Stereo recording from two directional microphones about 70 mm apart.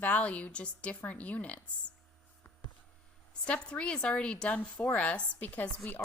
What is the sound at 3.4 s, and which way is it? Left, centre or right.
Speech, centre.